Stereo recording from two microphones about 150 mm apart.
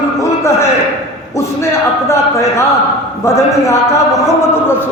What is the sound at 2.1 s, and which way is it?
A man's voice, 20° left (ahead or behind).